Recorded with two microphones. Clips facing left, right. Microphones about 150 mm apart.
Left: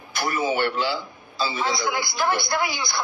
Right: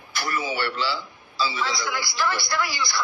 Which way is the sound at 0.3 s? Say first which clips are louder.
Left 4 dB; 50° left (ahead or behind).